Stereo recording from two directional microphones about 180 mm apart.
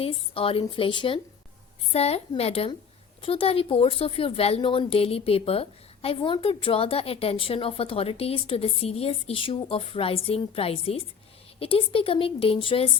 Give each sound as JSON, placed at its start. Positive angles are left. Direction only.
{"t": 0.0, "sound": "a woman's voice", "side_deg": 30}